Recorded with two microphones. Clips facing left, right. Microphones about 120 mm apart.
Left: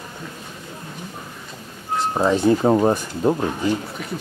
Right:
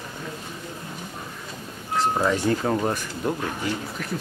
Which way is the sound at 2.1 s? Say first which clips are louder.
Left 9 dB; 25° left (ahead or behind).